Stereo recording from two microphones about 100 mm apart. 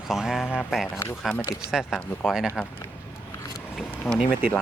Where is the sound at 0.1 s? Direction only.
5° right (ahead or behind).